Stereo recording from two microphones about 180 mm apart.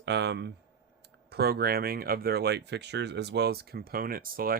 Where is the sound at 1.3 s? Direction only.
60° right (ahead or behind).